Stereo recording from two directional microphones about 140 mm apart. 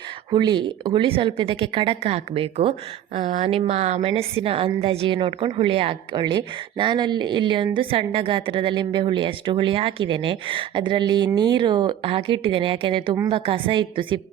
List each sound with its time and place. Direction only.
0.3 s a woman's voice: 35° right (ahead or behind)